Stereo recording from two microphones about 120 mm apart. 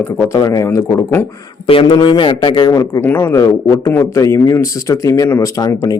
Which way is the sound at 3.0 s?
15° left (ahead or behind).